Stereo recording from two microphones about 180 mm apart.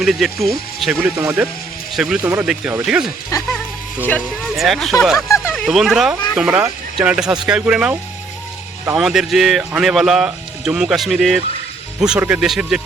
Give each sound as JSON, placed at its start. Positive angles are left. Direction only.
{"t": 0.0, "sound": "speech", "side_deg": 0}
{"t": 3.3, "sound": "speech", "side_deg": 20}
{"t": 4.5, "sound": "speech", "side_deg": 0}
{"t": 9.0, "sound": "speech", "side_deg": 0}